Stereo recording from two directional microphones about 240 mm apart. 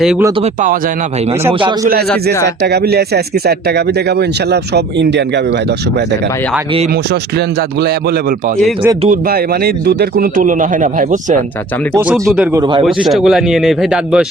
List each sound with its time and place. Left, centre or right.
0.0 s speech: centre
0.4 s speech: right
2.6 s speech: right
7.1 s speech: right
9.0 s speech: right
11.9 s speech: centre
12.5 s speech: centre
12.8 s speech: centre